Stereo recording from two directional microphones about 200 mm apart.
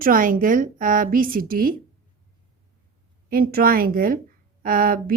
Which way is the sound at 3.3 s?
45° right (ahead or behind).